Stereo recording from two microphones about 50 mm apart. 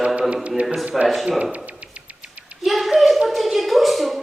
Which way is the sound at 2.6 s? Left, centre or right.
Centre.